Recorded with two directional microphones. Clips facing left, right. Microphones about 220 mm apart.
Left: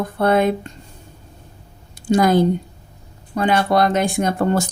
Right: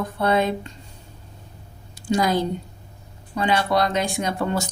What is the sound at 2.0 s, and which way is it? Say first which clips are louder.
Speech: left 6 dB; 55° left (ahead or behind).